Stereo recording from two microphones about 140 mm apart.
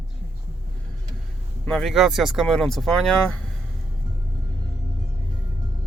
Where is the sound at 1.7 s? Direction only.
Centre (ahead or behind).